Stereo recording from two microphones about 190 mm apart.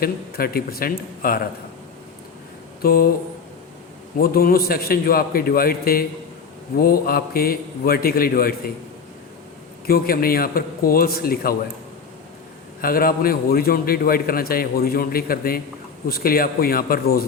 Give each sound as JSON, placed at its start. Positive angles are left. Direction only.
{"t": 0.0, "sound": "a man's voice", "side_deg": 50}
{"t": 2.8, "sound": "a man's voice", "side_deg": 55}
{"t": 4.2, "sound": "a man's voice", "side_deg": 50}
{"t": 9.8, "sound": "a man's voice", "side_deg": 50}
{"t": 12.8, "sound": "a man's voice", "side_deg": 50}